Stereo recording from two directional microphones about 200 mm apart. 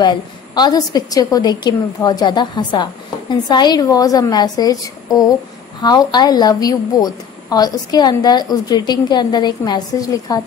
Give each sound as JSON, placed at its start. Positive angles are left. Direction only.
{"t": 0.0, "sound": "a woman's voice", "side_deg": 20}